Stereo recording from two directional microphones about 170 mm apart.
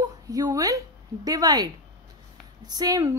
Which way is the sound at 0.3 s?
20° right (ahead or behind).